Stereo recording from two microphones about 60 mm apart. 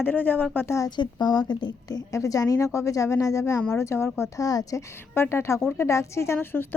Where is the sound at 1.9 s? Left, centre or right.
Left.